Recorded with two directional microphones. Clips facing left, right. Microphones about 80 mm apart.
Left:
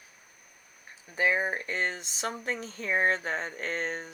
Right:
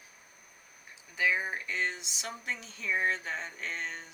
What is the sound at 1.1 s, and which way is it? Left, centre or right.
Speech, left.